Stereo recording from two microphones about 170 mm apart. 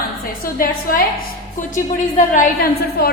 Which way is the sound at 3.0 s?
65° left (ahead or behind).